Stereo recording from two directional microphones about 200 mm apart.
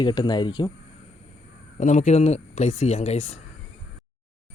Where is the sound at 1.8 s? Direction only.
35° left (ahead or behind).